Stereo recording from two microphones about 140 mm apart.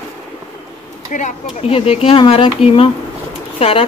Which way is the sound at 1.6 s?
40° left (ahead or behind).